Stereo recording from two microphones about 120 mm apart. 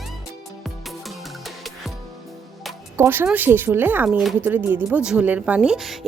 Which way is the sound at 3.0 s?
15° right (ahead or behind).